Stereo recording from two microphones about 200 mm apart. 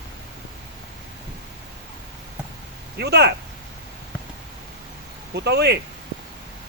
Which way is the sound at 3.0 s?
55° right (ahead or behind).